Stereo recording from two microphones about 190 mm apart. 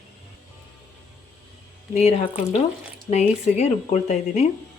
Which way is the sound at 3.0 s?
35° left (ahead or behind).